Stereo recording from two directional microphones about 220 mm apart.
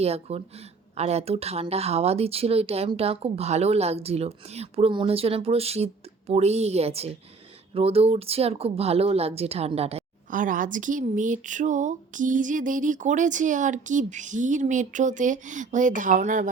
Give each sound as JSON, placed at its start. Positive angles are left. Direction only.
{"t": 0.0, "sound": "speech", "side_deg": -30}